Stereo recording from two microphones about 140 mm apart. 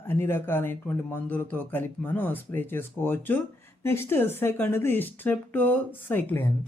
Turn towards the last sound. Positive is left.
turn(degrees=15)  # may be behind; listen again after turning